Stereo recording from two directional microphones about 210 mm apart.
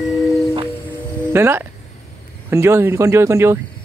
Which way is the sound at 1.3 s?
10° right (ahead or behind).